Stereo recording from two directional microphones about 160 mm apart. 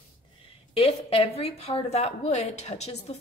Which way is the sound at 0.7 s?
35° left (ahead or behind).